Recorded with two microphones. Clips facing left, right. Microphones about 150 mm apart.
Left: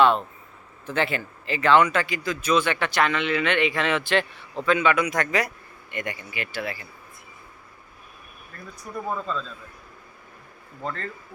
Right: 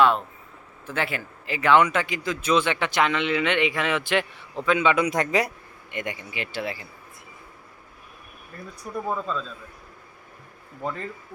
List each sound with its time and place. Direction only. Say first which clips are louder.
0.9 s speech: left 3 dB; 5° right (ahead or behind); by 6.8 s 25° right (ahead or behind)
8.5 s speech: right 2 dB; 10° right (ahead or behind)
10.8 s speech: right 1 dB; 15° right (ahead or behind)